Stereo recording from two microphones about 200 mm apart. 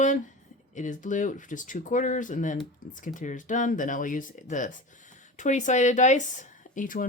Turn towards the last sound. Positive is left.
turn(degrees=40)  # may be behind; listen again after turning